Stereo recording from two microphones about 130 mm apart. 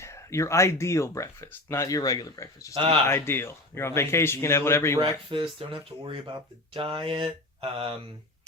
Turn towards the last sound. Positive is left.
turn(degrees=-45)  # may be behind; listen again after turning